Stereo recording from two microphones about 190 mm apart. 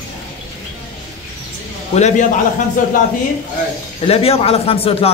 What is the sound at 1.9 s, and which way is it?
Speech, 35° left (ahead or behind).